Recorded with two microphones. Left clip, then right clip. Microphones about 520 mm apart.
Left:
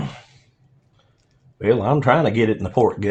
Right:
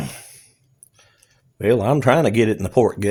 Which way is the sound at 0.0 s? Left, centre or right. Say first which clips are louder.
Even; right.